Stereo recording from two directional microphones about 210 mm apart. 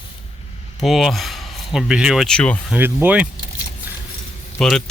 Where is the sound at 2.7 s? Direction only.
10° right (ahead or behind).